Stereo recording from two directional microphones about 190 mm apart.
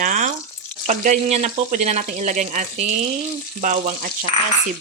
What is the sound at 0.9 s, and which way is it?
Speech, 40° right (ahead or behind).